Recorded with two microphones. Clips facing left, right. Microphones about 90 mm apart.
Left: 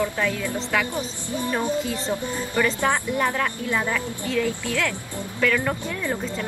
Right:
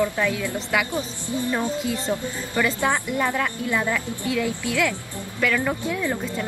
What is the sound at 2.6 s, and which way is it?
Speech, 15° right (ahead or behind).